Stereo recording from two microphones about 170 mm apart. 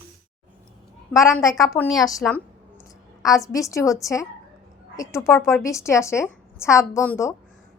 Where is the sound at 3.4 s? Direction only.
20° left (ahead or behind).